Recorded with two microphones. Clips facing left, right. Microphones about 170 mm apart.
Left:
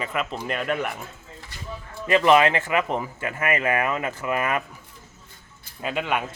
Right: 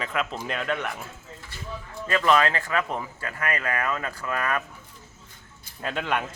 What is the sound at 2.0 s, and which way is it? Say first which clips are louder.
Speech: left 4 dB; 20° left (ahead or behind).